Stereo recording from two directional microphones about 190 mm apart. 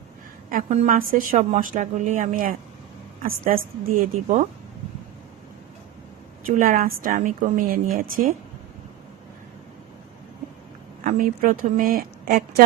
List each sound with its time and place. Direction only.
0.5 s a woman's voice: 40° right (ahead or behind)
6.5 s a woman's voice: 50° right (ahead or behind)
11.0 s a woman's voice: 45° right (ahead or behind)